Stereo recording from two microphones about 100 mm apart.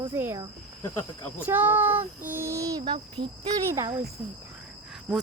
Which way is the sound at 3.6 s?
30° right (ahead or behind).